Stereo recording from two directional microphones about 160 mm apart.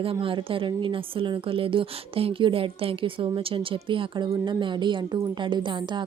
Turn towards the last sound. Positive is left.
turn(degrees=-30)  # may be behind; listen again after turning